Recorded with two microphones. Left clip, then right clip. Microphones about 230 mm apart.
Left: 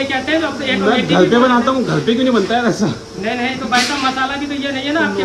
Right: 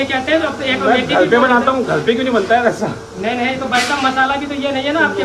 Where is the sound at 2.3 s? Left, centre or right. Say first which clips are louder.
Right 2 dB; left.